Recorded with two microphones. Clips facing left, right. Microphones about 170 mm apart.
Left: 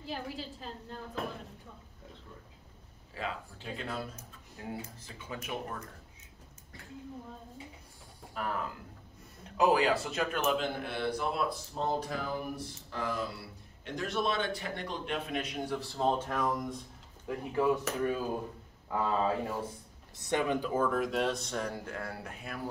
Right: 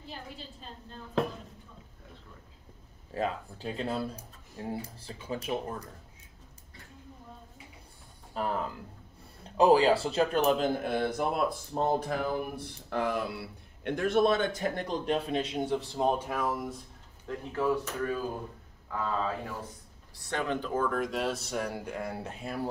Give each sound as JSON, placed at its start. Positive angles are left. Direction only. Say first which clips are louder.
{"t": 3.2, "sound": "a man's voice", "louder": "right 6 dB", "side_deg": -35}
{"t": 8.4, "sound": "a man's voice", "louder": "right 4 dB", "side_deg": -30}
{"t": 9.6, "sound": "a man's voice", "louder": "right 5 dB", "side_deg": -30}
{"t": 17.3, "sound": "speech", "louder": "even", "side_deg": 15}
{"t": 18.9, "sound": "speech", "louder": "left 2 dB", "side_deg": 25}
{"t": 20.2, "sound": "speech", "louder": "left 2 dB", "side_deg": 15}